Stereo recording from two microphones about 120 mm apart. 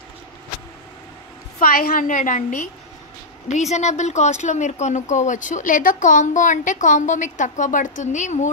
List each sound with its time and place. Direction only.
2.0 s speech: 90° left
3.4 s speech: 75° left (ahead or behind)